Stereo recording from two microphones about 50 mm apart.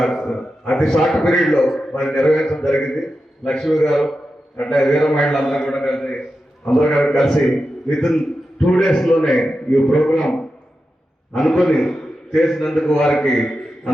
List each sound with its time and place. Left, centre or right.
0.0 s a sound: centre
0.7 s a man's voice: centre
1.8 s a man's voice: centre
2.0 s a man's voice: centre